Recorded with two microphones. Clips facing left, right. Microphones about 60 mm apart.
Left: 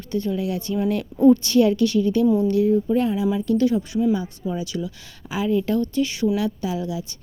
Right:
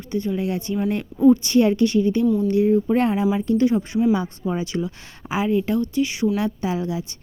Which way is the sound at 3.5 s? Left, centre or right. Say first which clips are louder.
Right 1 dB; right.